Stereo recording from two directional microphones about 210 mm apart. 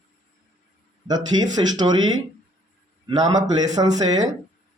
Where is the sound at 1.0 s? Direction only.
20° right (ahead or behind).